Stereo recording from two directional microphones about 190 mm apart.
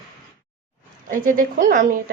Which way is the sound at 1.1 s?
45° right (ahead or behind).